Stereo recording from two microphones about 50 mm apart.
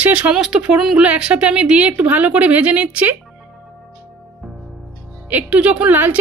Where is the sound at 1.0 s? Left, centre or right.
Right.